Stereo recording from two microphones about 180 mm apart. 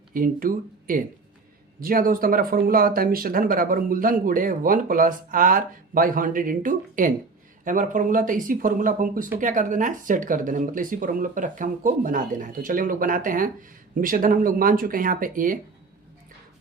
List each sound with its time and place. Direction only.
0.1 s speech: 50° right (ahead or behind)